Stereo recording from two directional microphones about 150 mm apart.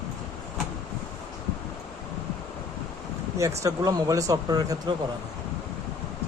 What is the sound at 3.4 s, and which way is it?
Speech, 20° right (ahead or behind).